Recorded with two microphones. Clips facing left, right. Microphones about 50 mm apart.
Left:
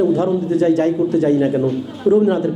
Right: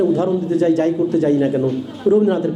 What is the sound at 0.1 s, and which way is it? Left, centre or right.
A man's voice, left.